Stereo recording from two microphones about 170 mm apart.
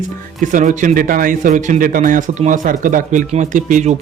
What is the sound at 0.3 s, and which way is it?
Speech, 50° right (ahead or behind).